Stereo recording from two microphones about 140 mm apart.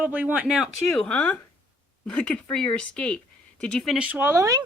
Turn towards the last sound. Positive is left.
turn(degrees=-25)  # may be behind; listen again after turning